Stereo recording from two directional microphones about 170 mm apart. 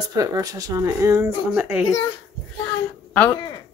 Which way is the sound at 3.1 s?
10° left (ahead or behind).